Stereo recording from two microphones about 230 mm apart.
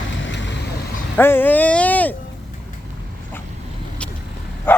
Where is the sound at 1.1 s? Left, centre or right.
Centre.